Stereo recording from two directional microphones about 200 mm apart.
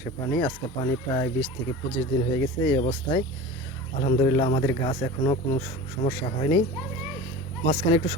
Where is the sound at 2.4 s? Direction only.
15° left (ahead or behind).